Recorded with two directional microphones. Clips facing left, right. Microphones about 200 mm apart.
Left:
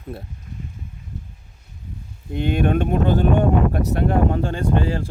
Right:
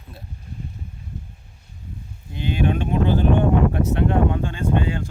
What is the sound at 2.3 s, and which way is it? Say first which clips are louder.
Speech: left 3 dB; 55° left (ahead or behind).